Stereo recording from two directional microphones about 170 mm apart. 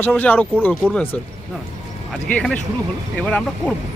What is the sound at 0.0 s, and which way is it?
Speech, 10° left (ahead or behind).